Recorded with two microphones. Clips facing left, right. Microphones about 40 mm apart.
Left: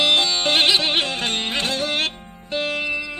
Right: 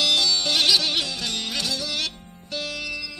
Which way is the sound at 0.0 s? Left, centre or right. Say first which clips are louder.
Left 3 dB; left.